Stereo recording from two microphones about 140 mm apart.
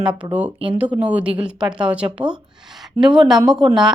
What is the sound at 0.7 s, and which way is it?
A woman's voice, 10° right (ahead or behind).